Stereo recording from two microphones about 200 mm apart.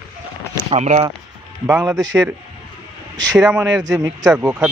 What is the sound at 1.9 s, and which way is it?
Speech, 20° right (ahead or behind).